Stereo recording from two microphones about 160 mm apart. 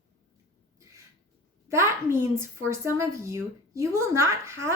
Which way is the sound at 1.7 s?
15° right (ahead or behind).